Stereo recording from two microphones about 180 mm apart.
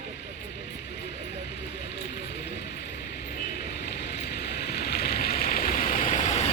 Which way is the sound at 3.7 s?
65° left (ahead or behind).